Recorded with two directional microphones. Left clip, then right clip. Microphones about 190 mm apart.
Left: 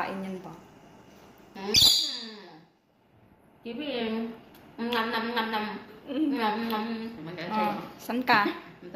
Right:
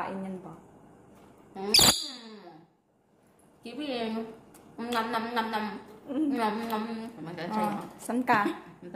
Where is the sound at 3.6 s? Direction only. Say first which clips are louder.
Left 1 dB; 65° right (ahead or behind).